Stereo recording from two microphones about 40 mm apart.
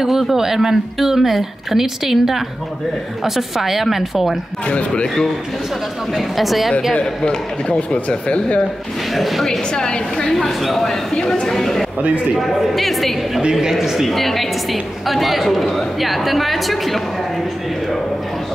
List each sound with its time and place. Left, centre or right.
0.0 s speech: centre
4.6 s speech: left
5.0 s speech: centre
6.3 s a woman's voice: centre
7.0 s speech: left
9.1 s a woman's voice: centre
9.5 s speech: left
10.3 s a woman's voice: centre
13.4 s speech: centre
14.1 s a woman's voice: centre